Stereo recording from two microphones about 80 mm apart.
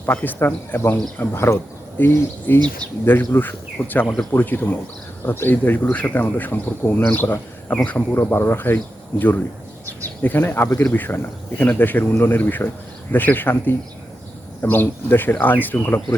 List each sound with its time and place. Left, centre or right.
0.0 s speech: left
1.2 s speech: left
4.0 s speech: centre
4.3 s a man's voice: left
8.1 s speech: left